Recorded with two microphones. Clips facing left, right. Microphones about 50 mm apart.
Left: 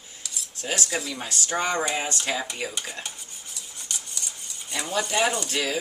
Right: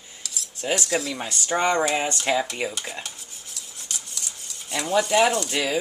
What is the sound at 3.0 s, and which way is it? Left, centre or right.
Cutlery, centre.